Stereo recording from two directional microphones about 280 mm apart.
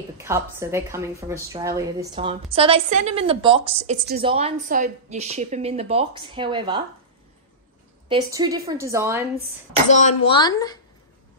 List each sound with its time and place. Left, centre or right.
0.2 s a woman's voice: centre
8.1 s a woman's voice: centre
9.8 s speech: left